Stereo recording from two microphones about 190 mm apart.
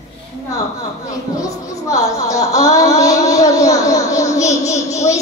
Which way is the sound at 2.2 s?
15° left (ahead or behind).